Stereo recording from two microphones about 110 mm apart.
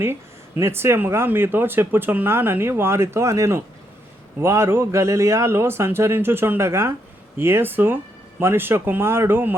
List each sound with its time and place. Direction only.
0.0 s speech: 20° right (ahead or behind)